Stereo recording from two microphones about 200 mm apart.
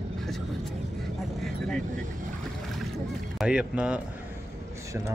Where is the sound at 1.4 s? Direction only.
5° left (ahead or behind).